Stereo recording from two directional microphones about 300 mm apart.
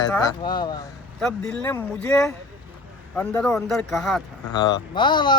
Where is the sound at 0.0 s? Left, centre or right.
Centre.